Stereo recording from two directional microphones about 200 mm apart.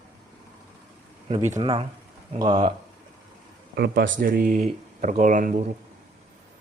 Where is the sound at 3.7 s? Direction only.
55° right (ahead or behind).